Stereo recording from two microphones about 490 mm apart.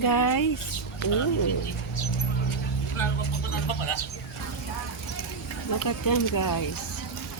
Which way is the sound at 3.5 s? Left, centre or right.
Left.